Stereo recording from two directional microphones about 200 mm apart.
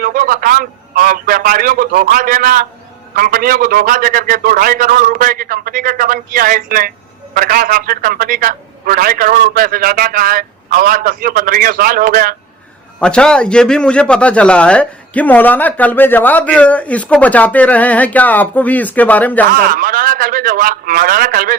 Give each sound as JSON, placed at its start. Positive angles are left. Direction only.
{"t": 0.0, "sound": "a man's voice", "side_deg": -45}
{"t": 13.0, "sound": "speech", "side_deg": 5}
{"t": 19.5, "sound": "a man's voice", "side_deg": -45}